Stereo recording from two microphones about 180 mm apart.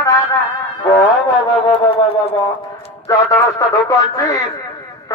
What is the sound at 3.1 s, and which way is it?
A man's voice, 20° left (ahead or behind).